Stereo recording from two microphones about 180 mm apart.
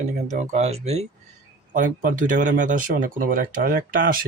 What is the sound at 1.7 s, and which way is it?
Speech, 45° right (ahead or behind).